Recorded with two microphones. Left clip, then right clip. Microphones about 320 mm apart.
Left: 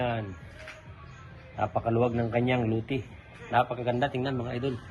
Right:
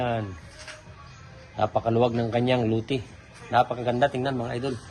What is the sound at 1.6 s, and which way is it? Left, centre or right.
Speech, right.